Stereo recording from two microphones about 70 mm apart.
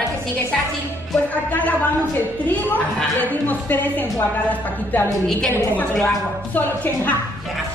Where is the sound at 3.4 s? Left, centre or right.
Left.